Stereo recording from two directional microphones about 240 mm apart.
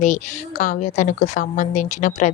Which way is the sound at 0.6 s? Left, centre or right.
Left.